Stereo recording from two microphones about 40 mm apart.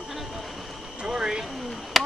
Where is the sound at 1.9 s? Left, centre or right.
Centre.